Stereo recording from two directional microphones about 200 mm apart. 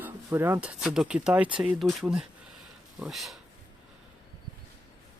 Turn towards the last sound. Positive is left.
turn(degrees=0)  # may be behind; listen again after turning